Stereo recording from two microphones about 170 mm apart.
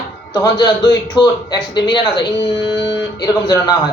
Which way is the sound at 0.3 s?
25° left (ahead or behind).